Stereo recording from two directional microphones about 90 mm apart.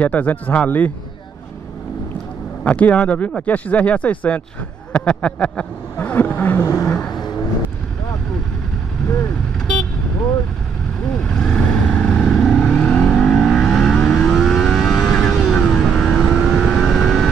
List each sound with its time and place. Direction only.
0.0 s speech: 15° left (ahead or behind)
2.6 s speech: 15° left (ahead or behind)
6.6 s vehicle: 35° left (ahead or behind)
11.2 s vehicle: 10° left (ahead or behind)